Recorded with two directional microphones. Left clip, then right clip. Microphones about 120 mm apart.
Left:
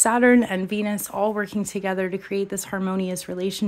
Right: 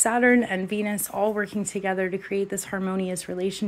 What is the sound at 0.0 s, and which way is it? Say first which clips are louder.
Speech: left 3 dB; 45° left (ahead or behind).